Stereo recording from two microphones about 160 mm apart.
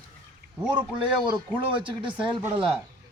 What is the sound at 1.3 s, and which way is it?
A man's voice, 30° right (ahead or behind).